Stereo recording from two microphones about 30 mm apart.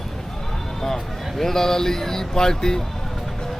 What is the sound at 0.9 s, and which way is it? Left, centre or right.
Speech, centre.